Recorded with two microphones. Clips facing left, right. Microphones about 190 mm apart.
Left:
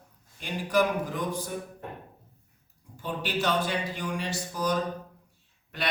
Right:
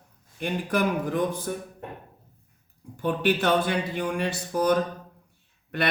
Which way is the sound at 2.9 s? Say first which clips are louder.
Right 8 dB; 60° right (ahead or behind).